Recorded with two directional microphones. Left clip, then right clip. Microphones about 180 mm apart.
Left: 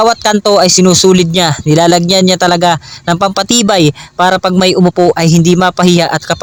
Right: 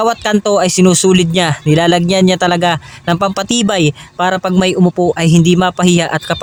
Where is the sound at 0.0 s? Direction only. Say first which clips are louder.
Left 4 dB; 35° left (ahead or behind).